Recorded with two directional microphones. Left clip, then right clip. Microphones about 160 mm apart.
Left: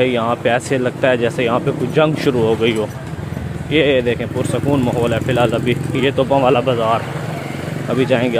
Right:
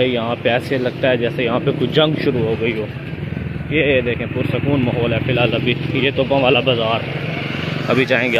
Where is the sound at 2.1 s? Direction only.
35° left (ahead or behind).